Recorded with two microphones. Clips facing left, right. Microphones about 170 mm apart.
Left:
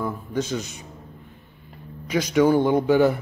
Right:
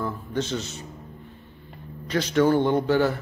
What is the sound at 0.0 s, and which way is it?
Speech, 10° left (ahead or behind).